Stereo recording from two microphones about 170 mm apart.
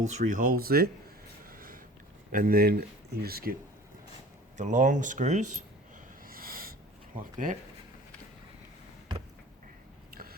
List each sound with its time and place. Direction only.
0.0 s speech: 45° right (ahead or behind); by 0.9 s 60° right (ahead or behind)
1.5 s a sound: 55° right (ahead or behind)
2.3 s speech: 60° right (ahead or behind)
4.5 s speech: 45° right (ahead or behind)
6.2 s snort: 60° right (ahead or behind)
7.2 s speech: 50° right (ahead or behind)
10.1 s a sound: 60° right (ahead or behind)